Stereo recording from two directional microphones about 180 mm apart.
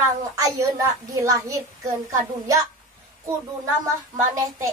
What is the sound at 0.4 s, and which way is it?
A child's voice, 20° right (ahead or behind).